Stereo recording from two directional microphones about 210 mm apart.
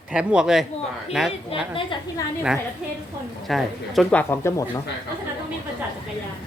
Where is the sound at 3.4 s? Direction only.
Centre (ahead or behind).